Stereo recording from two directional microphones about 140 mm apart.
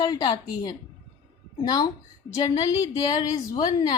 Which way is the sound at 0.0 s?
35° left (ahead or behind).